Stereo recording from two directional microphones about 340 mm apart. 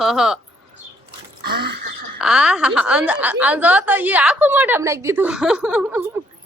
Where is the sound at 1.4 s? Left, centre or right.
Right.